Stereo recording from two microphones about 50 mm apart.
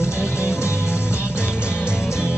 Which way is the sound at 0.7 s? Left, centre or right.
Left.